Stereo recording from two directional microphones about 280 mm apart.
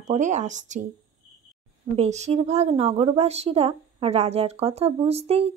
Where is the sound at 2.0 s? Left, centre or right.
Right.